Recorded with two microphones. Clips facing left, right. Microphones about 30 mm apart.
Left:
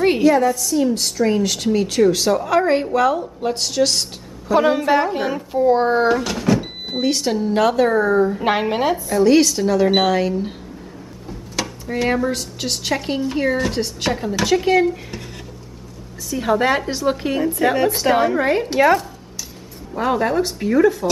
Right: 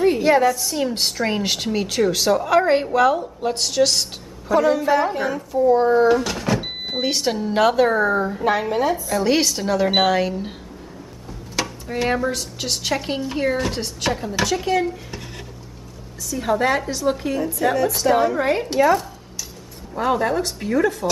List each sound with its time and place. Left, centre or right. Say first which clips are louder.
0.2 s a woman's voice: left 1 dB; right
1.6 s a woman's voice: left 4 dB; centre
4.6 s a woman's voice: left 1 dB; left
5.5 s a woman's voice: even; left
6.0 s a woman's voice: left 1 dB; centre
8.4 s a woman's voice: left 1 dB; left
9.2 s a woman's voice: left 8 dB; centre
11.5 s drawer open or close: left 1 dB; centre
12.3 s a woman's voice: left 1 dB; centre
16.3 s a woman's voice: left 2 dB; centre
18.4 s a woman's voice: left 2 dB; centre
20.0 s a woman's voice: left 2 dB; centre